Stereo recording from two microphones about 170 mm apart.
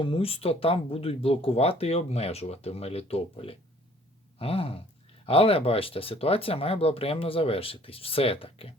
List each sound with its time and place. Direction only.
0.0 s speech: 35° left (ahead or behind)
4.4 s a sound: 35° left (ahead or behind)
5.2 s speech: 35° left (ahead or behind)